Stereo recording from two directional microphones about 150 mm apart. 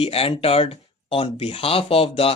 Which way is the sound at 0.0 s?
40° left (ahead or behind).